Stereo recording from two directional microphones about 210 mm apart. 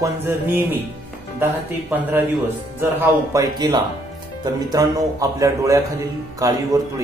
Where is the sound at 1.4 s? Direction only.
10° right (ahead or behind).